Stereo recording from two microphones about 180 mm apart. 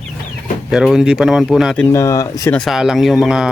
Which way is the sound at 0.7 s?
5° right (ahead or behind).